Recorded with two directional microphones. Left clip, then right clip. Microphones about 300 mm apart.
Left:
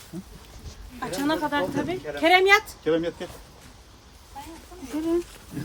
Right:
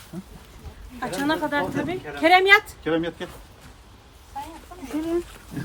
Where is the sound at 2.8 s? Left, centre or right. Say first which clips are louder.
Even; centre.